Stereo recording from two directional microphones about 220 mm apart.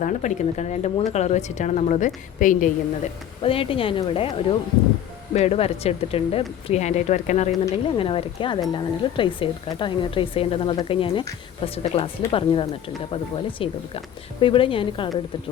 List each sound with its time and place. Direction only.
0.0 s a woman's voice: 35° left (ahead or behind)
3.4 s a woman's voice: 25° left (ahead or behind)